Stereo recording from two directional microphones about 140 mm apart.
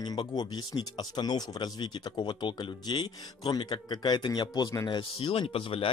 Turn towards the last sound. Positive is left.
turn(degrees=40)  # may be behind; listen again after turning